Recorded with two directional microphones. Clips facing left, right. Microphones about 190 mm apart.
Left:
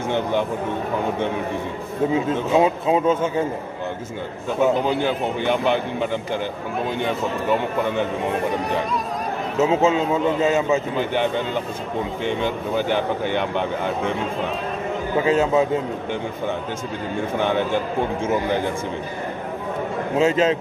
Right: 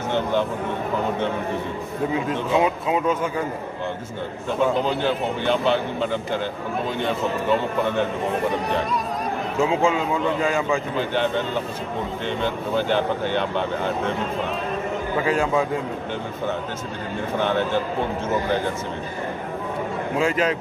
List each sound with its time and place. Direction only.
0.1 s speech: 15° left (ahead or behind)
2.1 s a man's voice: 25° left (ahead or behind)
4.6 s a man's voice: 15° left (ahead or behind)
9.6 s a man's voice: 20° left (ahead or behind)
15.2 s a man's voice: 25° left (ahead or behind)
17.4 s a man's voice: 15° left (ahead or behind)
20.2 s a man's voice: 25° left (ahead or behind)